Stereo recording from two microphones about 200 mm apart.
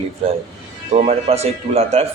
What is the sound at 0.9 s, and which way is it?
Speech, 35° right (ahead or behind).